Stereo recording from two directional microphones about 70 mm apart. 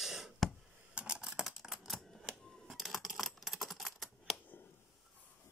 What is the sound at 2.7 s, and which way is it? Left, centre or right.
Typing, centre.